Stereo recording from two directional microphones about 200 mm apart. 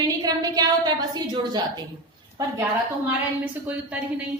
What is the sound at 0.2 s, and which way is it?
A woman's voice, 20° right (ahead or behind).